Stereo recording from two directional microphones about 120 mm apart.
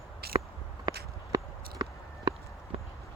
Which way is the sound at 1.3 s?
35° right (ahead or behind).